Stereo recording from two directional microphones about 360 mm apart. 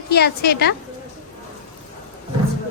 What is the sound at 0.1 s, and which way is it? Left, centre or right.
Speech, left.